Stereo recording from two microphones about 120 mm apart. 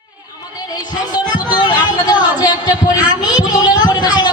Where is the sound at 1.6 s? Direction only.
35° left (ahead or behind).